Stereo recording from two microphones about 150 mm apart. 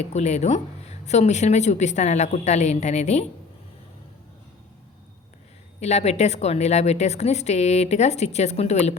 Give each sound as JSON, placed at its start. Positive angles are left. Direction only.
{"t": 0.0, "sound": "a woman's voice", "side_deg": 50}
{"t": 5.8, "sound": "a woman's voice", "side_deg": 45}